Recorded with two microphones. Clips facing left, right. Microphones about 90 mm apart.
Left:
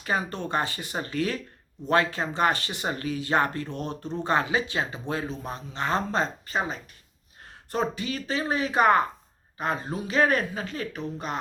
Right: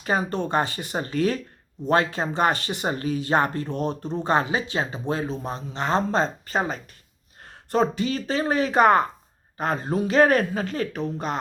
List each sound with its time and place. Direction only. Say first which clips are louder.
0.0 s speech: right 4 dB; 35° right (ahead or behind)
7.7 s speech: right 6 dB; 35° right (ahead or behind)
9.9 s speech: right 6 dB; 55° right (ahead or behind)